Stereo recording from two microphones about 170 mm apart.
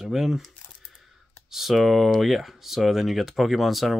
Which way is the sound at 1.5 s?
Centre (ahead or behind).